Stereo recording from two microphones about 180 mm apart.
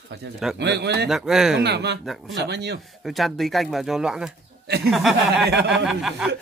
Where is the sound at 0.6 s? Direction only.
70° right (ahead or behind).